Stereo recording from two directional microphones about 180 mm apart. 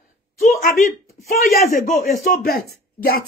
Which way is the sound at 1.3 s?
55° left (ahead or behind).